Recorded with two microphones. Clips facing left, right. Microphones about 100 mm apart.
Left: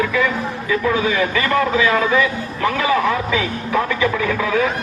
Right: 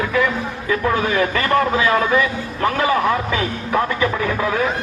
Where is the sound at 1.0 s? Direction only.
50° right (ahead or behind).